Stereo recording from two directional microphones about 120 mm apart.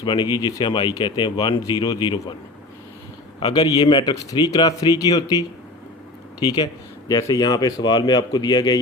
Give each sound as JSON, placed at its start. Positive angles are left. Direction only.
{"t": 0.0, "sound": "speech", "side_deg": 40}
{"t": 3.5, "sound": "speech", "side_deg": 35}